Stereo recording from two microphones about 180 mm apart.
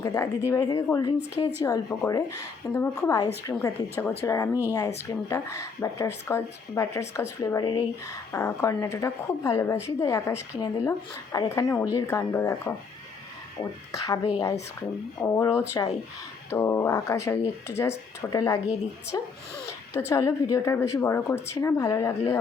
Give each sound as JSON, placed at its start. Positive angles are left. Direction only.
{"t": 0.0, "sound": "a woman's voice", "side_deg": 15}
{"t": 8.3, "sound": "a woman's voice", "side_deg": 15}